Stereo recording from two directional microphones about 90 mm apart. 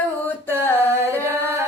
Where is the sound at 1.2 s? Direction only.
25° right (ahead or behind).